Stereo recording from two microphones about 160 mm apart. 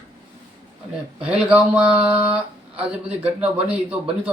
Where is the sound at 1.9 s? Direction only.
35° right (ahead or behind).